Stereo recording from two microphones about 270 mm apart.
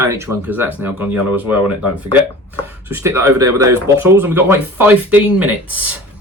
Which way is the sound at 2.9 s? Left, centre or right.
Centre.